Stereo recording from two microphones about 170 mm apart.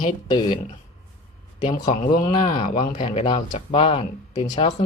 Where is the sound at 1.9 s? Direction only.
45° left (ahead or behind).